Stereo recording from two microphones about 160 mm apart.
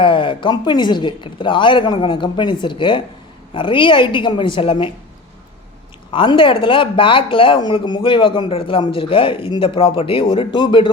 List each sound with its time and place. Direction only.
0.0 s speech: 30° left (ahead or behind)
6.1 s speech: 30° left (ahead or behind)